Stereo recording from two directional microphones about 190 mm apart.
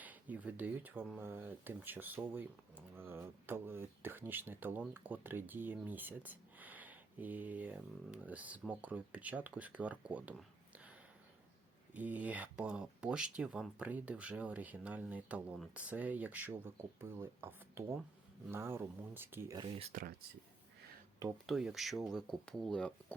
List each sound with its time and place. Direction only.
0.0 s speech: 10° right (ahead or behind)
11.9 s speech: 10° right (ahead or behind)
19.9 s speech: 45° right (ahead or behind)
21.4 s speech: centre (ahead or behind)